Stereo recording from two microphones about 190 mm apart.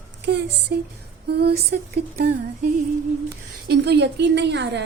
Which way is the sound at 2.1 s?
50° right (ahead or behind).